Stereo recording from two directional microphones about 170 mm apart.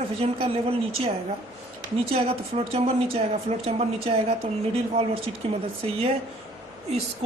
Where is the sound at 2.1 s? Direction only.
35° right (ahead or behind).